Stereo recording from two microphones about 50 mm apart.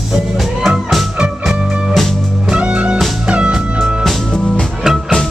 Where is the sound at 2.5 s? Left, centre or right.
Right.